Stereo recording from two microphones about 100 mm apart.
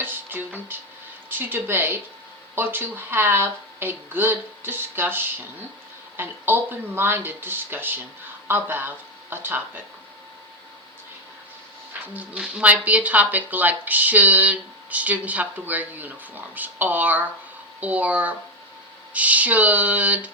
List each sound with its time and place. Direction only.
0.0 s music: 20° right (ahead or behind)
1.3 s speech: 20° right (ahead or behind)
12.1 s speech: 10° right (ahead or behind)